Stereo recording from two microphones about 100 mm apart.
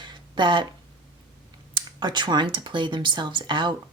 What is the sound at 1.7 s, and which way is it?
Speech, 50° right (ahead or behind).